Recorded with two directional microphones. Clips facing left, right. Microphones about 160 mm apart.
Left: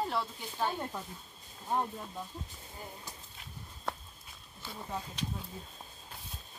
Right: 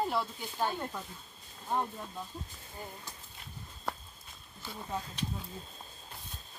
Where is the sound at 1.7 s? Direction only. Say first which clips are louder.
Even; 10° left (ahead or behind).